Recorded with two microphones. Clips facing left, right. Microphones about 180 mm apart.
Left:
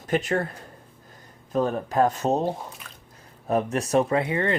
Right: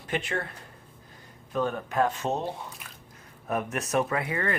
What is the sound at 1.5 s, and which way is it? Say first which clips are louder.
Speech: left 4 dB; 35° left (ahead or behind).